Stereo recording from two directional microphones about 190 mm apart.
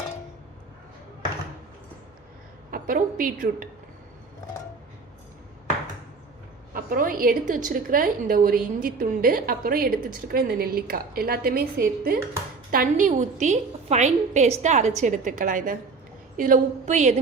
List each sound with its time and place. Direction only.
2.6 s a woman's voice: 45° right (ahead or behind)
6.7 s a woman's voice: 50° right (ahead or behind)